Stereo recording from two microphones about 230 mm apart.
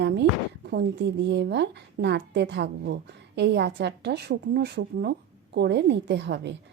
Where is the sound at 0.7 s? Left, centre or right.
Right.